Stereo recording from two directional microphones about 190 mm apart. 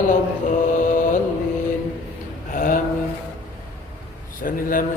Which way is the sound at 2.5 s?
45° left (ahead or behind).